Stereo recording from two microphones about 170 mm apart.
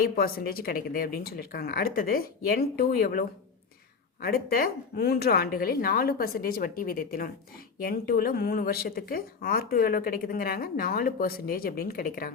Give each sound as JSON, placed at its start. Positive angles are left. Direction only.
{"t": 0.0, "sound": "speech", "side_deg": 60}